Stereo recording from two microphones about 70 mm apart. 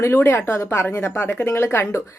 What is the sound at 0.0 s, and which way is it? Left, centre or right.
Speech, left.